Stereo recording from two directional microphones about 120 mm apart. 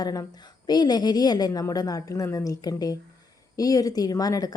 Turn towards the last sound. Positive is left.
turn(degrees=30)  # may be behind; listen again after turning